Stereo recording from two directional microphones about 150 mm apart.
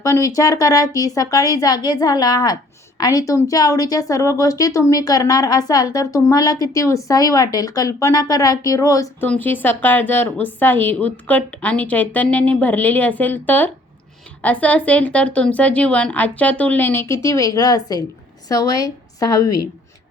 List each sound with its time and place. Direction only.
0.0 s a woman's voice: 20° left (ahead or behind)
9.2 s a woman's voice: 10° left (ahead or behind)